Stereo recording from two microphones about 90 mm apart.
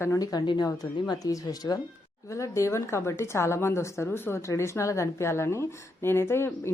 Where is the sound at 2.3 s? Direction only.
35° left (ahead or behind).